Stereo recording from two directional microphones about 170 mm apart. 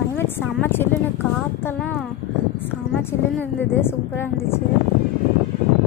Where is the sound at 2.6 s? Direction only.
15° left (ahead or behind).